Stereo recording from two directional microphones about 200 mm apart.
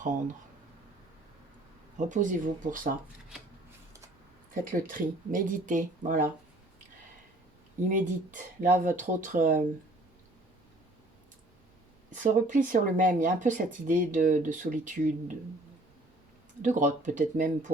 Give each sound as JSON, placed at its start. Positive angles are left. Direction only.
{"t": 2.0, "sound": "speech", "side_deg": -40}
{"t": 4.6, "sound": "speech", "side_deg": -45}
{"t": 7.9, "sound": "speech", "side_deg": -40}
{"t": 12.2, "sound": "speech", "side_deg": -40}
{"t": 16.6, "sound": "speech", "side_deg": -40}